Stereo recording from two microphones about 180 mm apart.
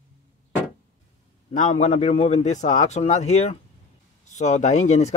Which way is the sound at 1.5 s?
40° left (ahead or behind).